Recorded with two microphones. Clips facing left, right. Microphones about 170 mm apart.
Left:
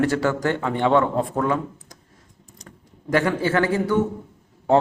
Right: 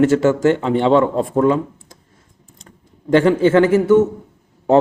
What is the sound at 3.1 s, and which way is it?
Speech, 25° right (ahead or behind).